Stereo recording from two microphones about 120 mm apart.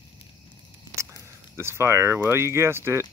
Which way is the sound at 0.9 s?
25° right (ahead or behind).